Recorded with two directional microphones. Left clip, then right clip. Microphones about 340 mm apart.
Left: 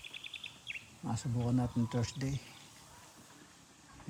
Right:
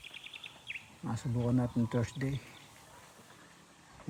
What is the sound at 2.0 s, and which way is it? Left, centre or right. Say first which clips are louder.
Speech: right 2 dB; left.